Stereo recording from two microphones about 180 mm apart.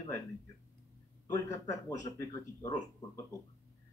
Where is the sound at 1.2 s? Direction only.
20° left (ahead or behind).